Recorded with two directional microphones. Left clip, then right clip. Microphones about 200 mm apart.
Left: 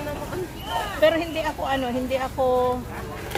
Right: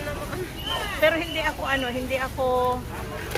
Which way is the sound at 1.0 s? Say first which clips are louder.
Left 2 dB; 30° left (ahead or behind).